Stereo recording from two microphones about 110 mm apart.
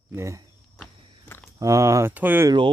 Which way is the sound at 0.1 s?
25° right (ahead or behind).